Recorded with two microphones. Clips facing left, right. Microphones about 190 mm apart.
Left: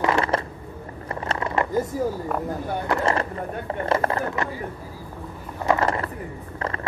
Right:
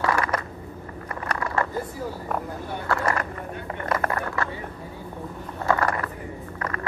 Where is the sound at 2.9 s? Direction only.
25° left (ahead or behind).